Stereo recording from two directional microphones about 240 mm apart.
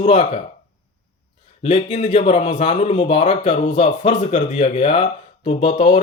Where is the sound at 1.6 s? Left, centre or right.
Left.